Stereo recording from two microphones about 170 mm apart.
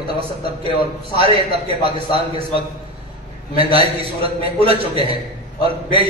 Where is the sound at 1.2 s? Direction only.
35° right (ahead or behind).